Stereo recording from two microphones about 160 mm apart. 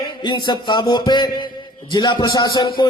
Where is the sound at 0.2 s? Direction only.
30° left (ahead or behind).